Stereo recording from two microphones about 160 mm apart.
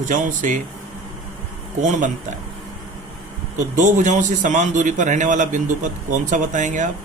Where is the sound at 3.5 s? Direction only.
50° right (ahead or behind).